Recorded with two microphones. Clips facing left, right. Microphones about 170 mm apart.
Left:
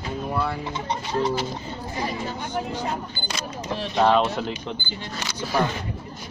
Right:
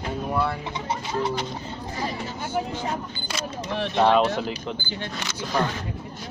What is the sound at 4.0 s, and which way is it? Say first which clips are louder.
Speech: even; centre (ahead or behind).